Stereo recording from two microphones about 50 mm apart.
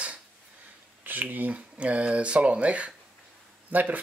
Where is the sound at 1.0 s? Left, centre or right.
Right.